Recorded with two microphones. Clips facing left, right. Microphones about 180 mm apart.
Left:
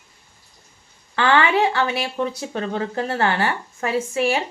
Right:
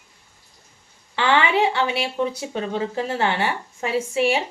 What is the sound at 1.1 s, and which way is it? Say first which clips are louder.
Speech: left 1 dB; 15° right (ahead or behind).